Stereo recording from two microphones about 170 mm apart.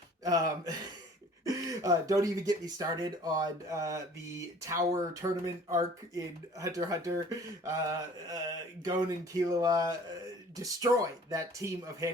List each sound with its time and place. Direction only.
0.3 s speech: 20° right (ahead or behind)